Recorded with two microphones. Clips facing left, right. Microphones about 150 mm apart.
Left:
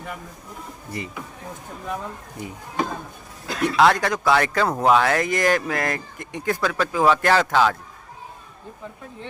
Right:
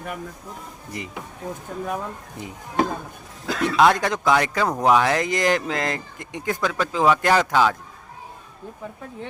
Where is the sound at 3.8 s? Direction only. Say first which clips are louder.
Even; 20° right (ahead or behind).